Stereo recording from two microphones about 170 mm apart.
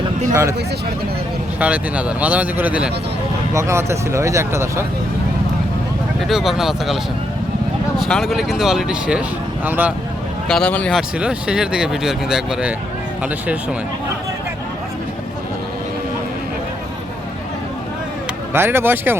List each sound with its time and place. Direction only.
1.5 s speech: 10° right (ahead or behind)
6.1 s speech: centre (ahead or behind)
10.5 s speech: 5° left (ahead or behind)
11.2 s speech: 5° right (ahead or behind)
18.5 s speech: 15° right (ahead or behind)